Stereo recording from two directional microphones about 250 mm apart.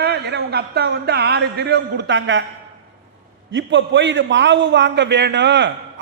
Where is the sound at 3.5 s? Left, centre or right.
Right.